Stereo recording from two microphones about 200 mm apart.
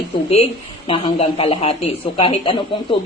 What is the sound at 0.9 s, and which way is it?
A man's voice, 30° left (ahead or behind).